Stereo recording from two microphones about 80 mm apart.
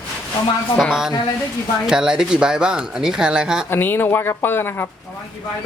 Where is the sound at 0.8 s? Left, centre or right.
Centre.